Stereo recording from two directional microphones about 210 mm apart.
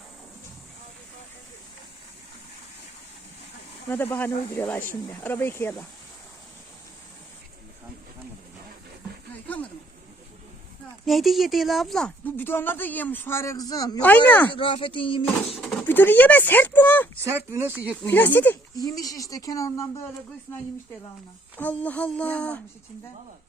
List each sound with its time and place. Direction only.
3.8 s speech: 10° left (ahead or behind)
11.0 s speech: centre (ahead or behind)
14.5 s speech: 25° left (ahead or behind)
15.5 s speech: centre (ahead or behind)
17.2 s speech: 15° right (ahead or behind)
18.0 s speech: 10° left (ahead or behind)
21.5 s speech: 5° left (ahead or behind)